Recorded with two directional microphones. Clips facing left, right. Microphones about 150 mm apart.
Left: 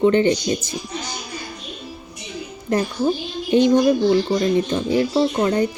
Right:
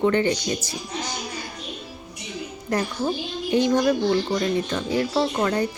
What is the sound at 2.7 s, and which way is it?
A woman's voice, 25° left (ahead or behind).